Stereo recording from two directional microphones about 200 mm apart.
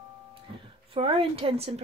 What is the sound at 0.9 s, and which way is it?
Speech, 25° right (ahead or behind).